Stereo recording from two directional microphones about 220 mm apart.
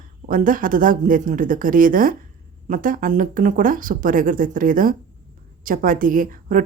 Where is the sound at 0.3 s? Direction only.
40° right (ahead or behind).